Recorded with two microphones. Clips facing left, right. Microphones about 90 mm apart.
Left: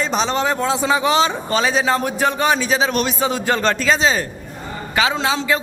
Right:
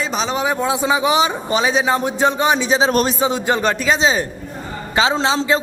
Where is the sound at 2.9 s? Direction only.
40° right (ahead or behind).